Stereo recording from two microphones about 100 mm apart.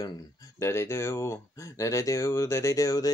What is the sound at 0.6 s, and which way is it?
Speech, 25° left (ahead or behind).